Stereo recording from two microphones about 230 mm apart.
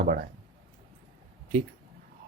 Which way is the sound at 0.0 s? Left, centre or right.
Right.